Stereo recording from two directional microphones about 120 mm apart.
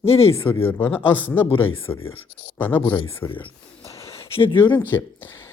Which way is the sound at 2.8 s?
45° left (ahead or behind).